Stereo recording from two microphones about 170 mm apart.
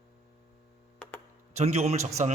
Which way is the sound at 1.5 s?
40° right (ahead or behind).